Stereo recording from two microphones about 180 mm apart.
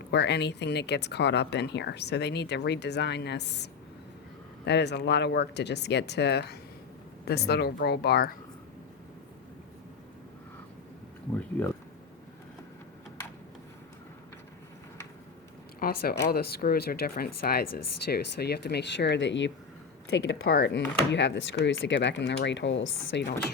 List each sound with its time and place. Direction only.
0.1 s speech: 70° left (ahead or behind)
15.8 s speech: 55° left (ahead or behind); by 19.5 s 80° left
20.1 s speech: 70° left (ahead or behind)